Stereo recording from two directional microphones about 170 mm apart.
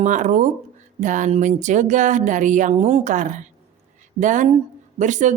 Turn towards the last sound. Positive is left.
turn(degrees=-45)  # may be behind; listen again after turning